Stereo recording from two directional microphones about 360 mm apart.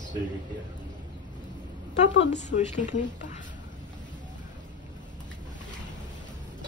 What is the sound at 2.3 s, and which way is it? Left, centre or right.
Speech, centre.